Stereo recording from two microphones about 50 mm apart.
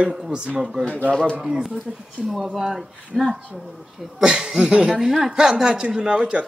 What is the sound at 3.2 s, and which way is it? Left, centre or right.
Speech, right.